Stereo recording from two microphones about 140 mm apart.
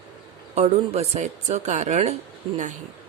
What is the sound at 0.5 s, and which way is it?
Speech, 50° right (ahead or behind).